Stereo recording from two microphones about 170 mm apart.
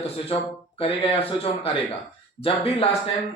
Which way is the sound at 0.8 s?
35° left (ahead or behind).